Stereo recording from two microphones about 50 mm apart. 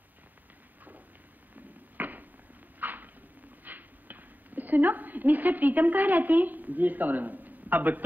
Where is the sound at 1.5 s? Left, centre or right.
Right.